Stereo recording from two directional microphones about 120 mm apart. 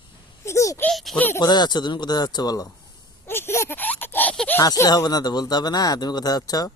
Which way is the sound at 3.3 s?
20° left (ahead or behind).